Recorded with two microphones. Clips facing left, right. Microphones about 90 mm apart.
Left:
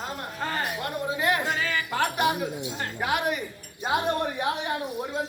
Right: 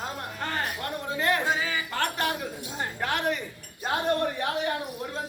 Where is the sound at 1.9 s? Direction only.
15° left (ahead or behind).